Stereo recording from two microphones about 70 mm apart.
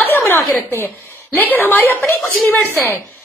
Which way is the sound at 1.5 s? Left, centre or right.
Left.